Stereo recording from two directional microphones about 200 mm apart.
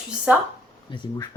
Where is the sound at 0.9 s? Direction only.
20° left (ahead or behind).